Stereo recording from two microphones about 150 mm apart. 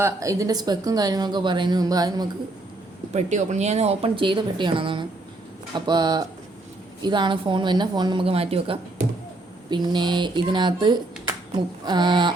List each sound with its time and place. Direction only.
0.0 s a woman's voice: 20° right (ahead or behind)
3.1 s a woman's voice: 50° right (ahead or behind); by 12.3 s 30° right (ahead or behind)